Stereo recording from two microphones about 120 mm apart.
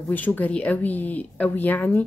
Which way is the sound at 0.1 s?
15° left (ahead or behind).